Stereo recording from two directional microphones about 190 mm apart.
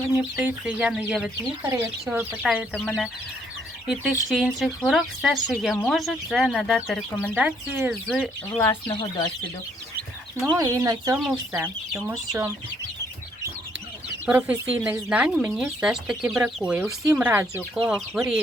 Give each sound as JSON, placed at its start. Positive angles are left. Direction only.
{"t": 0.2, "sound": "speech", "side_deg": -10}
{"t": 8.5, "sound": "speech", "side_deg": 10}
{"t": 8.9, "sound": "speech", "side_deg": 25}
{"t": 10.5, "sound": "speech", "side_deg": -20}
{"t": 14.3, "sound": "speech", "side_deg": -10}